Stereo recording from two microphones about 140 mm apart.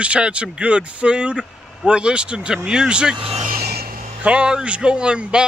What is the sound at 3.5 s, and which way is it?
Rub, 90° right.